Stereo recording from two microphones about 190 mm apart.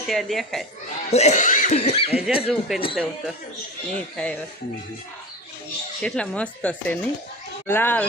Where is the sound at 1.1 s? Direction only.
35° left (ahead or behind).